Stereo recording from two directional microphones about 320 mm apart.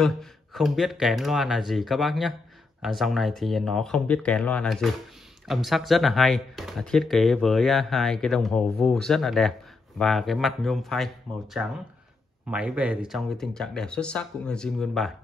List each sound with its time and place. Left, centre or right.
0.0 s speech: centre